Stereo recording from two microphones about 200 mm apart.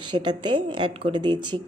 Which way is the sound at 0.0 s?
25° right (ahead or behind).